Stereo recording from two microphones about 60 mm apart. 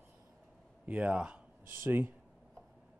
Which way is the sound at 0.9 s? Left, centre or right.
Centre.